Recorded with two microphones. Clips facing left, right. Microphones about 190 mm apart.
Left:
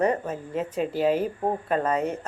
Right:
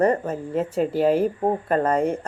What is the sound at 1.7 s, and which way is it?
Speech, 50° right (ahead or behind).